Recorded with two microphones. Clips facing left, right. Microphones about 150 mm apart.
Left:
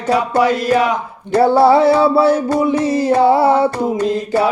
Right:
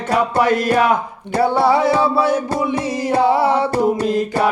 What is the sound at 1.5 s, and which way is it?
Music, 30° left (ahead or behind).